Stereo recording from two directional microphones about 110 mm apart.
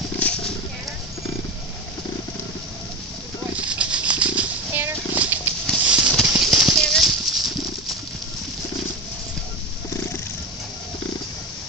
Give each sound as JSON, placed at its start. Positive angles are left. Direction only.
{"t": 0.2, "sound": "wild animals", "side_deg": 5}
{"t": 3.5, "sound": "a sound", "side_deg": -10}
{"t": 5.9, "sound": "clip-clop", "side_deg": -10}
{"t": 6.3, "sound": "horse", "side_deg": 0}